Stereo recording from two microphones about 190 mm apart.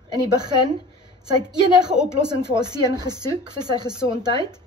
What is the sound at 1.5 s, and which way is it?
Speech, 5° right (ahead or behind).